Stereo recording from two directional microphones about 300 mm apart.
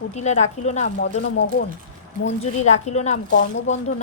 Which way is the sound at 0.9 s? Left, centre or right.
Left.